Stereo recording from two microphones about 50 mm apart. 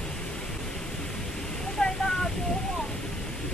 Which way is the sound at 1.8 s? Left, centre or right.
Centre.